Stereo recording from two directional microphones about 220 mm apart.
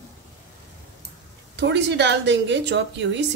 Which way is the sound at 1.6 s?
50° right (ahead or behind).